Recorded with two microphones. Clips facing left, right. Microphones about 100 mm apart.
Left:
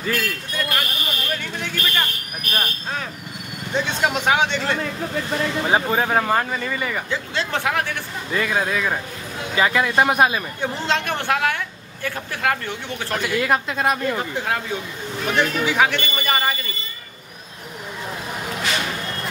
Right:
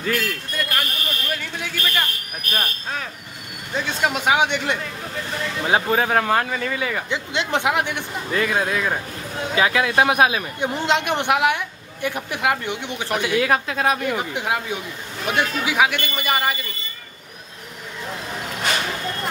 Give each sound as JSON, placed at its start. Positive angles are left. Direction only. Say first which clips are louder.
{"t": 0.0, "sound": "a sound", "louder": "right 1 dB", "side_deg": 0}
{"t": 1.3, "sound": "fire alarm", "louder": "left 1 dB", "side_deg": -5}
{"t": 2.5, "sound": "a woman's voice", "louder": "even", "side_deg": 0}
{"t": 5.6, "sound": "speech", "louder": "right 2 dB", "side_deg": 0}
{"t": 7.1, "sound": "speech", "louder": "right 1 dB", "side_deg": -20}
{"t": 8.3, "sound": "a woman's voice", "louder": "even", "side_deg": 0}
{"t": 10.6, "sound": "a woman's voice", "louder": "right 3 dB", "side_deg": -15}
{"t": 13.4, "sound": "a woman's voice", "louder": "left 1 dB", "side_deg": -5}